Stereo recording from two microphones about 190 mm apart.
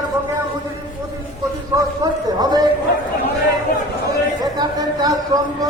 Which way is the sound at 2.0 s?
20° right (ahead or behind).